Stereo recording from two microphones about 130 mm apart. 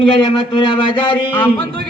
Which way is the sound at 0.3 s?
40° left (ahead or behind).